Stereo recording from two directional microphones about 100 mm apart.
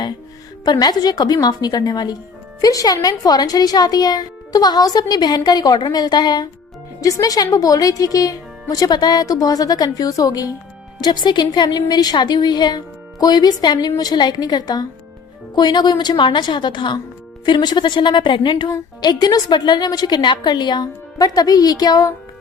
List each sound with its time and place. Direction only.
0.6 s a woman's voice: 40° left (ahead or behind)
18.7 s a woman's voice: 40° left (ahead or behind)